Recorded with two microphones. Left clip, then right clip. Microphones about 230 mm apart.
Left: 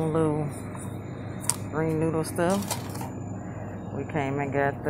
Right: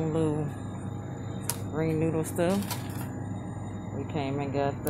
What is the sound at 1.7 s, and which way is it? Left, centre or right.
Speech, centre.